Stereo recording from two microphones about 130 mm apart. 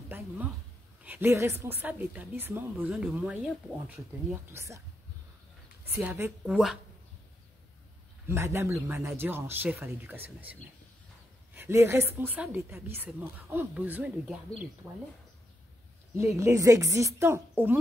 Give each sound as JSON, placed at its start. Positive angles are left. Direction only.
{"t": 1.0, "sound": "a woman's voice", "side_deg": -15}
{"t": 4.5, "sound": "a woman's voice", "side_deg": -20}
{"t": 5.9, "sound": "a woman's voice", "side_deg": -15}
{"t": 6.4, "sound": "speech", "side_deg": -5}
{"t": 8.3, "sound": "a woman's voice", "side_deg": -20}
{"t": 16.3, "sound": "a woman's voice", "side_deg": -25}